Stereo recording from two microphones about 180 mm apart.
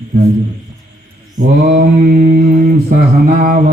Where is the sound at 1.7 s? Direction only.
55° right (ahead or behind).